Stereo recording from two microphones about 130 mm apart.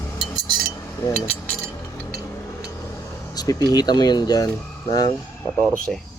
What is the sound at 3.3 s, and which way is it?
Speech, 30° left (ahead or behind).